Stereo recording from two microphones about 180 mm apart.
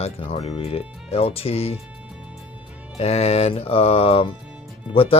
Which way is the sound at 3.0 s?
35° left (ahead or behind).